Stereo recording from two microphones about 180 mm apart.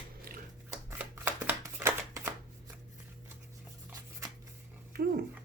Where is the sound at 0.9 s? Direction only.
15° right (ahead or behind).